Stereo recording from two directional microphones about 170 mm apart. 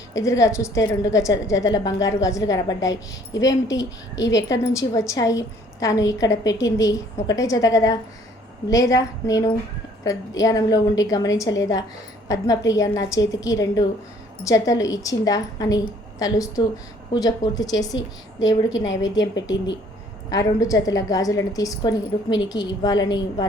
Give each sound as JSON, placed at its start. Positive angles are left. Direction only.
{"t": 0.1, "sound": "a woman's voice", "side_deg": 20}
{"t": 4.1, "sound": "a woman's voice", "side_deg": 90}
{"t": 4.6, "sound": "a woman's voice", "side_deg": 20}
{"t": 20.3, "sound": "a woman's voice", "side_deg": 20}